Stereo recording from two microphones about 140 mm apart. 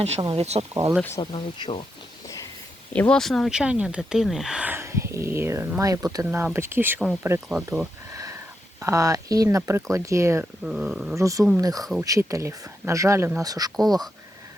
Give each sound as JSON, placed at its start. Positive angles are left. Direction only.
{"t": 0.0, "sound": "speech", "side_deg": -50}
{"t": 0.7, "sound": "speech", "side_deg": -20}
{"t": 1.2, "sound": "speech", "side_deg": 40}
{"t": 2.9, "sound": "speech", "side_deg": 10}
{"t": 8.1, "sound": "a sound", "side_deg": -25}
{"t": 8.8, "sound": "speech", "side_deg": -25}
{"t": 10.6, "sound": "speech", "side_deg": -5}
{"t": 11.2, "sound": "speech", "side_deg": -25}